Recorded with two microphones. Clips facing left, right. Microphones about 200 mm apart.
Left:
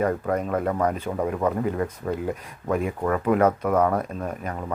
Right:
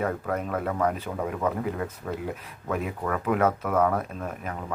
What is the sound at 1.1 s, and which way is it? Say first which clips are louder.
Speech: left 5 dB; 20° left (ahead or behind).